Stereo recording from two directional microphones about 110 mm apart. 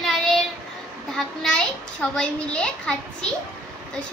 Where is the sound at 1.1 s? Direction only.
5° left (ahead or behind).